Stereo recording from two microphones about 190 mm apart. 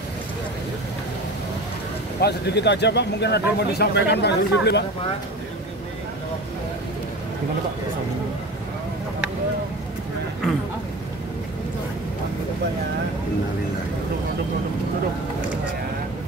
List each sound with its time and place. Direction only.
2.1 s speech: 60° left (ahead or behind)